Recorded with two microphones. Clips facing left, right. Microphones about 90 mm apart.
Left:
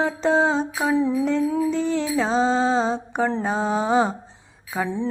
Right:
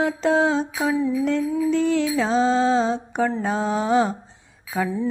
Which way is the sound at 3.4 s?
5° left (ahead or behind).